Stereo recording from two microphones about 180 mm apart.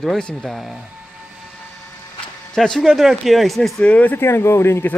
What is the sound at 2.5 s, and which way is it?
Speech, centre (ahead or behind).